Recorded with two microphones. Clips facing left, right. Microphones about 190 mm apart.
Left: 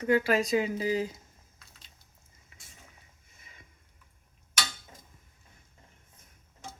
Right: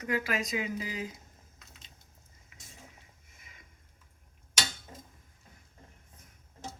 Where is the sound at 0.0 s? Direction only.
30° left (ahead or behind).